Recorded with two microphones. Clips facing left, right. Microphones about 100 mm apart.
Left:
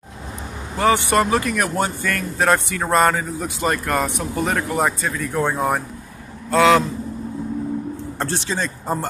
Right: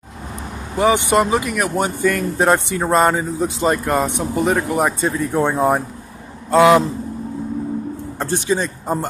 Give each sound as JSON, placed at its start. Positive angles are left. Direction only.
{"t": 0.7, "sound": "a man's voice", "side_deg": -15}
{"t": 5.1, "sound": "a man's voice", "side_deg": -30}
{"t": 8.2, "sound": "speech", "side_deg": -10}